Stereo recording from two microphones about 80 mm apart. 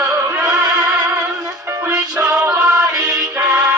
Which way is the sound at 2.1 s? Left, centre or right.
Centre.